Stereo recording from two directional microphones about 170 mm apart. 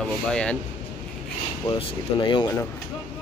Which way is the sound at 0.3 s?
5° left (ahead or behind).